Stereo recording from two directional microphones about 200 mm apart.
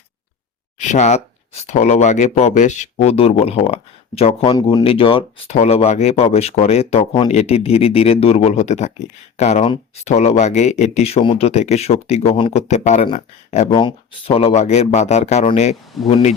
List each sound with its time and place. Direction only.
0.8 s speech: 35° left (ahead or behind)
13.7 s speech: 25° left (ahead or behind)